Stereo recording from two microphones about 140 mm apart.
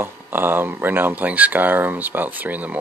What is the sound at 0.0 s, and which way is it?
Speech, 15° right (ahead or behind).